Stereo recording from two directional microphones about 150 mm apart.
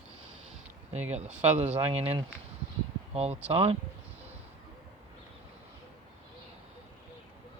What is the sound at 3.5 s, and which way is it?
Speech, 40° right (ahead or behind).